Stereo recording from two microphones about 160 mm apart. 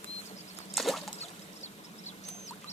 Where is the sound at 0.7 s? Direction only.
Centre (ahead or behind).